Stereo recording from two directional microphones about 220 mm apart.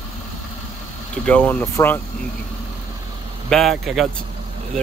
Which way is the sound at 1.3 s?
5° left (ahead or behind).